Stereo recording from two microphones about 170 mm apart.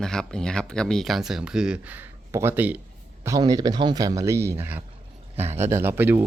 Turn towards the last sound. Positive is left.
turn(degrees=-10)  # may be behind; listen again after turning